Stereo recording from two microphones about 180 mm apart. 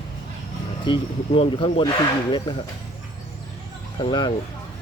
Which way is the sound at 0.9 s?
30° left (ahead or behind).